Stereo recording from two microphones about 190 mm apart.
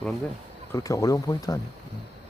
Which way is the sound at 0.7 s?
15° left (ahead or behind).